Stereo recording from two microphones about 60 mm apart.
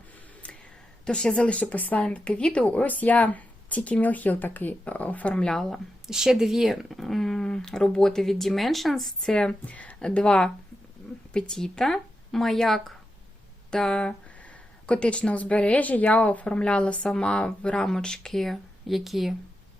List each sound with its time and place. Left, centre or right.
1.0 s speech: centre
2.0 s speech: centre
5.7 s speech: centre